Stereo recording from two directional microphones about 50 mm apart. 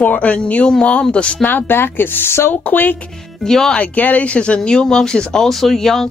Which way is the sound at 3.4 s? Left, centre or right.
Centre.